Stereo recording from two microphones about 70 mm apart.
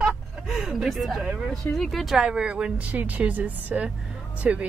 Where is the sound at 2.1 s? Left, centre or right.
Centre.